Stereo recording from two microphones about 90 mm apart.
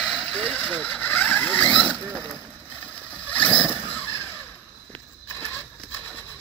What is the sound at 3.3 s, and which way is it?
Vehicle, 15° left (ahead or behind).